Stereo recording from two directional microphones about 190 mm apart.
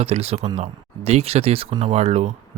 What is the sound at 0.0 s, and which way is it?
Speech, 30° right (ahead or behind).